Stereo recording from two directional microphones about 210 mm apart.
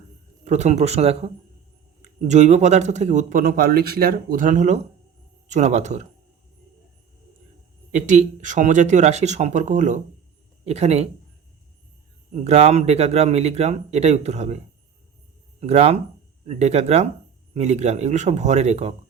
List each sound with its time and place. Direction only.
0.4 s speech: 35° right (ahead or behind)
7.9 s speech: 35° right (ahead or behind)
12.3 s speech: 30° right (ahead or behind)
15.6 s speech: 30° right (ahead or behind)